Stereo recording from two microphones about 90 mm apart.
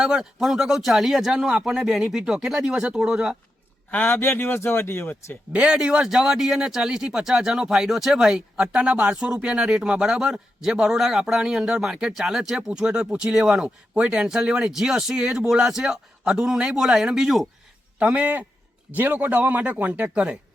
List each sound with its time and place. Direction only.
0.0 s speech: 5° right (ahead or behind)
3.9 s speech: 25° left (ahead or behind)
5.5 s a man's voice: 10° right (ahead or behind)
18.0 s a man's voice: 15° right (ahead or behind)